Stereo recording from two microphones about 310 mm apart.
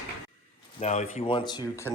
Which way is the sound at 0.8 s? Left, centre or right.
Left.